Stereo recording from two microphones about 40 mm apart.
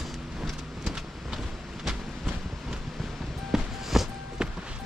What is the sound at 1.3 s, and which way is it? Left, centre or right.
Vehicle, centre.